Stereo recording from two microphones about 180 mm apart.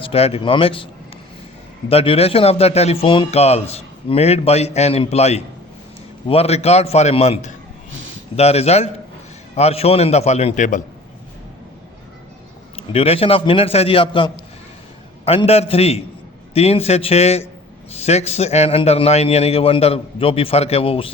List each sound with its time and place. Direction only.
0.0 s a man's voice: 35° left (ahead or behind)
1.9 s a man's voice: 35° left (ahead or behind)
7.9 s a sound: 90° right
8.4 s a man's voice: 35° left (ahead or behind)
12.9 s a man's voice: 35° left (ahead or behind)